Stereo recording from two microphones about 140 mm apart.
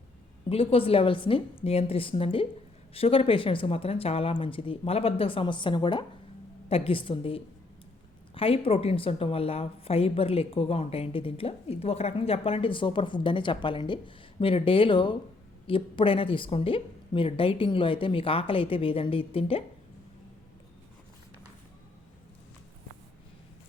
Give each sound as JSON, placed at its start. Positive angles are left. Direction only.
{"t": 0.4, "sound": "a woman's voice", "side_deg": 40}